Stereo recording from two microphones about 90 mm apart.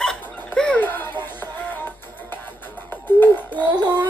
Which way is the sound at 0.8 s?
20° left (ahead or behind).